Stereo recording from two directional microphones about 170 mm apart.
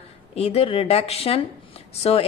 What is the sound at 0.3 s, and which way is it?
A woman's voice, 35° left (ahead or behind).